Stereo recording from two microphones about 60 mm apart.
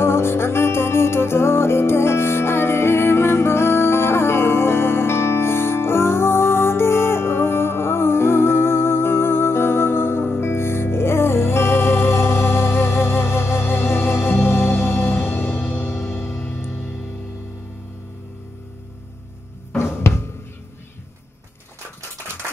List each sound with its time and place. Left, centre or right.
0.0 s music: left
19.7 s music: left